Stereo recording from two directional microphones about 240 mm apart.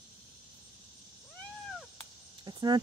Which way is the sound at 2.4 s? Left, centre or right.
Centre.